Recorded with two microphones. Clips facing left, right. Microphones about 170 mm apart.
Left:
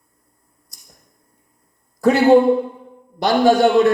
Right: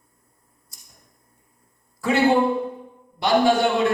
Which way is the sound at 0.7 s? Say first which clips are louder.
Left 1 dB; 40° left (ahead or behind).